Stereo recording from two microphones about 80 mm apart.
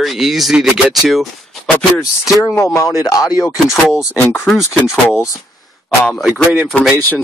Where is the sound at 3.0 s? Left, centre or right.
Left.